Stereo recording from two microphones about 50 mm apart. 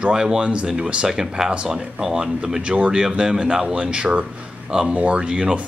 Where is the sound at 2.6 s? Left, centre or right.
Right.